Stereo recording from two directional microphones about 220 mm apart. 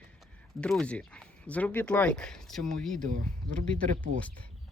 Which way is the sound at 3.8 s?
35° right (ahead or behind).